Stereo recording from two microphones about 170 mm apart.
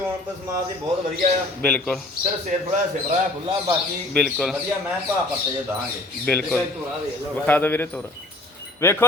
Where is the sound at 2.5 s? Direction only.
45° right (ahead or behind).